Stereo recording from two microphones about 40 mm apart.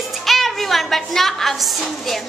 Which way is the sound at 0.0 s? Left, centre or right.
Centre.